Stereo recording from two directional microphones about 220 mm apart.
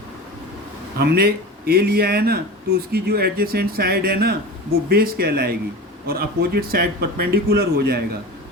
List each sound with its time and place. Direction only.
0.9 s speech: 45° right (ahead or behind)